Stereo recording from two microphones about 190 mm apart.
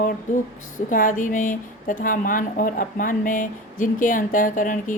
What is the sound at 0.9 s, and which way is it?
A woman's voice, 45° left (ahead or behind).